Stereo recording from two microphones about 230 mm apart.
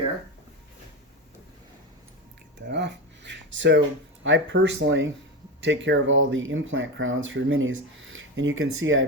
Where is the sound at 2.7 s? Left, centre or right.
Right.